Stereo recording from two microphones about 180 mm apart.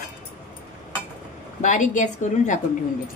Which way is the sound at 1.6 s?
45° left (ahead or behind).